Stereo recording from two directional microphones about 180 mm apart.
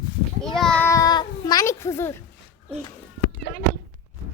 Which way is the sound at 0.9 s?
20° left (ahead or behind).